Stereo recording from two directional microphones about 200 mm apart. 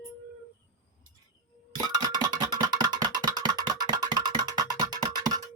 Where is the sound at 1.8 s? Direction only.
20° right (ahead or behind).